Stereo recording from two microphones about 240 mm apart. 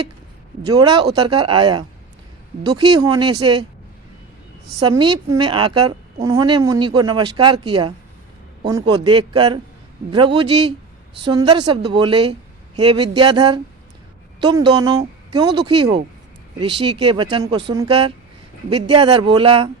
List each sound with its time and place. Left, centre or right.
0.6 s a woman's voice: centre
4.8 s a woman's voice: centre